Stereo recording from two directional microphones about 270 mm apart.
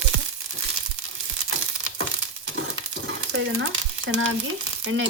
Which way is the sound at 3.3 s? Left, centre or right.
Right.